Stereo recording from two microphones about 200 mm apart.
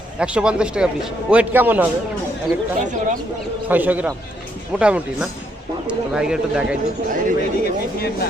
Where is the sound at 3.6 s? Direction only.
10° right (ahead or behind).